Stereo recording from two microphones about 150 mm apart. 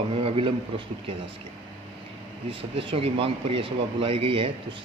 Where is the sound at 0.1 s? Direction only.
40° right (ahead or behind).